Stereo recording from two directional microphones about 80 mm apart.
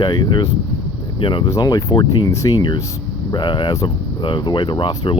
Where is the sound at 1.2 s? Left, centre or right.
Left.